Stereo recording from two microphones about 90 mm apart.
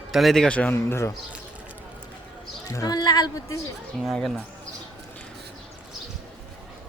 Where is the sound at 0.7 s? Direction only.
30° left (ahead or behind).